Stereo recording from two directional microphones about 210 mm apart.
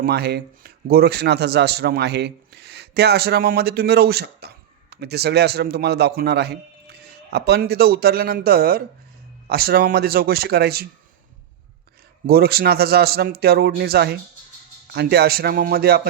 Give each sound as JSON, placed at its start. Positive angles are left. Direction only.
{"t": 0.0, "sound": "a man's voice", "side_deg": -50}
{"t": 12.2, "sound": "a man's voice", "side_deg": -45}